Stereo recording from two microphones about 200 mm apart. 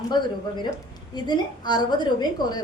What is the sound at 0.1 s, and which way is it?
A woman's voice, 20° left (ahead or behind).